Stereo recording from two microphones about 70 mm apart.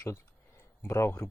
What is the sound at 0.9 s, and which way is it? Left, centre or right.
Speech, left.